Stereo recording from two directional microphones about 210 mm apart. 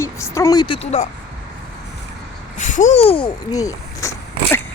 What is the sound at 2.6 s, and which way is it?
Speech, 35° left (ahead or behind).